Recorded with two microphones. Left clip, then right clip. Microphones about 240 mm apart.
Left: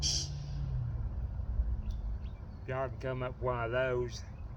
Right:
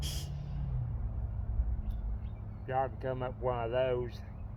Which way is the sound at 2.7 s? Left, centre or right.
Left.